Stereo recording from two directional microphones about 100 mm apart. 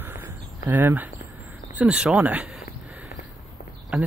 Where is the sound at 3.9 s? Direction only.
10° right (ahead or behind).